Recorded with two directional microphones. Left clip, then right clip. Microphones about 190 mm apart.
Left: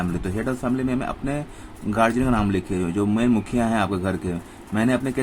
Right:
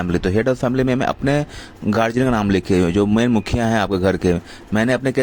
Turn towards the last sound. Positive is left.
turn(degrees=-45)  # may be behind; listen again after turning